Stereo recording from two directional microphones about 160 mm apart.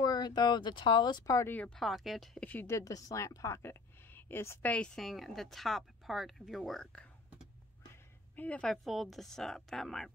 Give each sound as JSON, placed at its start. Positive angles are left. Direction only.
{"t": 0.0, "sound": "speech", "side_deg": 25}
{"t": 1.8, "sound": "speech", "side_deg": 0}
{"t": 8.4, "sound": "speech", "side_deg": 5}